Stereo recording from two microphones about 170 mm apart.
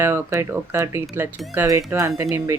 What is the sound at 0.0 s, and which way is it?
Speech, 15° right (ahead or behind).